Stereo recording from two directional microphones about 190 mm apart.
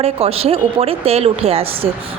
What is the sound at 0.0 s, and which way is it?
A woman's voice, 30° right (ahead or behind).